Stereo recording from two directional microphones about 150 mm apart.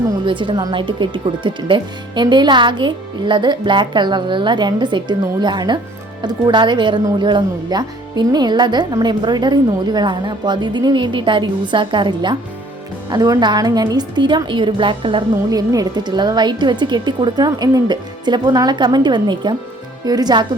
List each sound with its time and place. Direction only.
0.3 s a woman's voice: 30° right (ahead or behind)